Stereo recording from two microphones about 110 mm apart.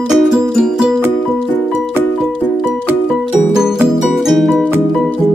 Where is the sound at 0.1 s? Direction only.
10° right (ahead or behind).